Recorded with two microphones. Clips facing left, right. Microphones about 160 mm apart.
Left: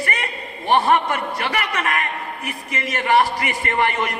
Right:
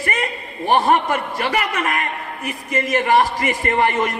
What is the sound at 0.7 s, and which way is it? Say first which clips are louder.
A man's voice: right 1 dB; 40° right (ahead or behind).